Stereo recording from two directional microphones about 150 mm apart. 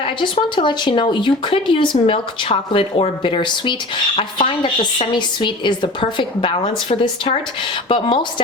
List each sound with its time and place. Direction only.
0.0 s speech: 35° left (ahead or behind)
7.9 s speech: 35° left (ahead or behind)